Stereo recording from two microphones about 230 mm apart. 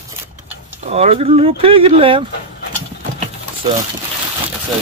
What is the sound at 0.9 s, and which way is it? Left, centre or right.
Speech, right.